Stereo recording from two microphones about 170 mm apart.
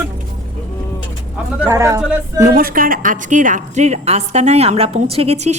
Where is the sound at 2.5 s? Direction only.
60° right (ahead or behind).